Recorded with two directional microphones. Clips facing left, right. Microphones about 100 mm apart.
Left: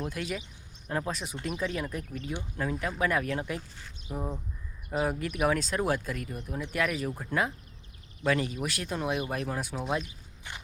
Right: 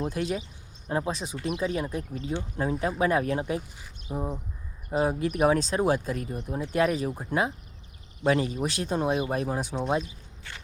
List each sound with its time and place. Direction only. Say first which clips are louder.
0.0 s speech: right 5 dB; 25° right (ahead or behind)
3.6 s speech: right 2 dB; 10° right (ahead or behind)
10.5 s walk: left 1 dB; 20° left (ahead or behind)